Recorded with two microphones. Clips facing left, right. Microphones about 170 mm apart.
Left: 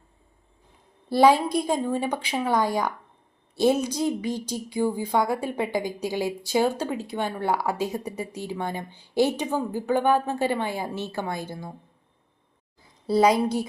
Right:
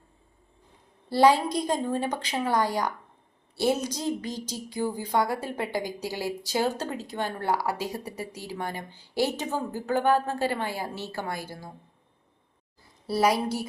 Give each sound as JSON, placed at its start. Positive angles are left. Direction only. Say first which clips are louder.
{"t": 1.1, "sound": "a woman's voice", "louder": "left 2 dB", "side_deg": 15}
{"t": 13.1, "sound": "a woman's voice", "louder": "left 4 dB", "side_deg": 20}